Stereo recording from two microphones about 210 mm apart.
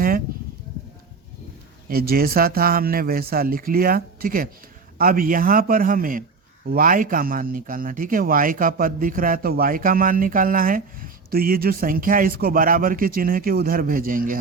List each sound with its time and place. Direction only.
1.9 s speech: 45° right (ahead or behind)